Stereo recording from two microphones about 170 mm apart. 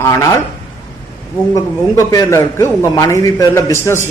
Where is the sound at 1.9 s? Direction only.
20° left (ahead or behind).